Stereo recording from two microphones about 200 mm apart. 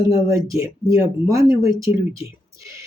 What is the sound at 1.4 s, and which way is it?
Speech, 25° left (ahead or behind).